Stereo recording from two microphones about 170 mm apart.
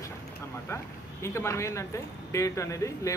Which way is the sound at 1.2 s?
15° left (ahead or behind).